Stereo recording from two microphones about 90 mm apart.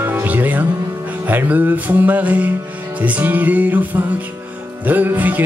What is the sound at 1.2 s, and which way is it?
Music, 20° right (ahead or behind).